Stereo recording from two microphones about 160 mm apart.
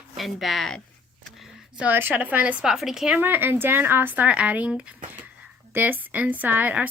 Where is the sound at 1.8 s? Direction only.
10° right (ahead or behind).